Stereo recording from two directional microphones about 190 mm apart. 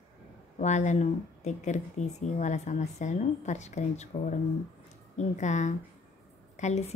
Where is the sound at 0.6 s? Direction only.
40° left (ahead or behind).